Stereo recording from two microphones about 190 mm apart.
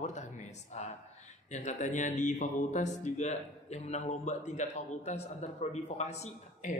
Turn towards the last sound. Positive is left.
turn(degrees=40)  # may be behind; listen again after turning